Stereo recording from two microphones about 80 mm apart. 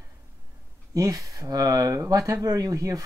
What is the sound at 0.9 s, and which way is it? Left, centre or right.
Speech, right.